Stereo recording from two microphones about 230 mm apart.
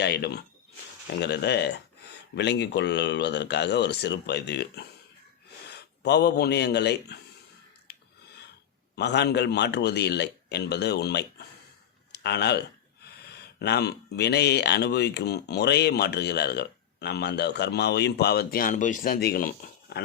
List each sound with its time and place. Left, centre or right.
0.0 s speech: left
7.9 s a sound: left
9.0 s speech: left